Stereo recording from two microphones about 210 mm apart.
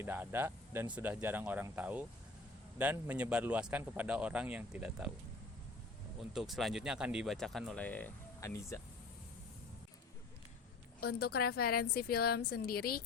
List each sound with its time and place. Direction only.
0.0 s a man's voice: 10° right (ahead or behind)
6.3 s speech: centre (ahead or behind)
11.0 s a woman's voice: 45° left (ahead or behind)